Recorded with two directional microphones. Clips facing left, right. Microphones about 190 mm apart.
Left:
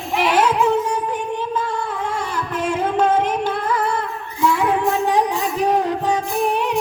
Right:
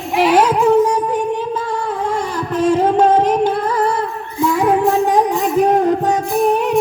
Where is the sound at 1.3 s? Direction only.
40° right (ahead or behind).